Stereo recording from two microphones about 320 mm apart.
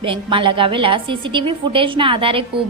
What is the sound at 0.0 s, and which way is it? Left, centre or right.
A woman's voice, centre.